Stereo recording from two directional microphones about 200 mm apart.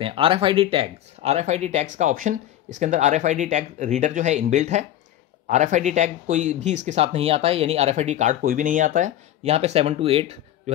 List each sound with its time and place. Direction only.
0.0 s speech: 25° right (ahead or behind)